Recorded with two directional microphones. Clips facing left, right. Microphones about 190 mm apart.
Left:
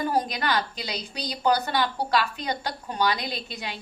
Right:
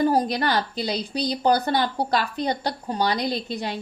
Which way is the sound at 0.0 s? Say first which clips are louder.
Right 5 dB; 40° right (ahead or behind).